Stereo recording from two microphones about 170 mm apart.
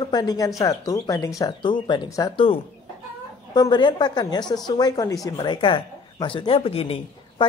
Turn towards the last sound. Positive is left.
turn(degrees=35)  # may be behind; listen again after turning